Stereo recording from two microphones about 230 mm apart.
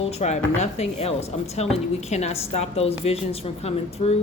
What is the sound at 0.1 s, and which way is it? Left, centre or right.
A woman's voice, left.